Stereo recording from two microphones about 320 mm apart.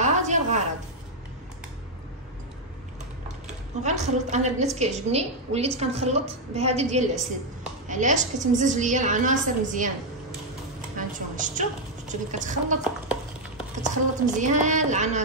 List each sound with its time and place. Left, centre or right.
0.0 s a sound: right
3.4 s a woman's voice: right
11.0 s a woman's voice: right
13.8 s a woman's voice: right